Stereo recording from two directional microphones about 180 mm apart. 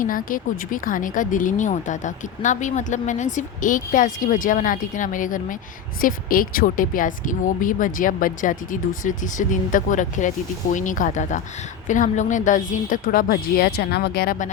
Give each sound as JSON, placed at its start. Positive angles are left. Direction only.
{"t": 0.0, "sound": "speech", "side_deg": 50}